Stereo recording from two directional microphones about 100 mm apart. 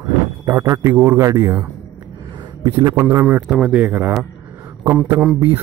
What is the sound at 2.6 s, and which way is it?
Speech, 35° right (ahead or behind).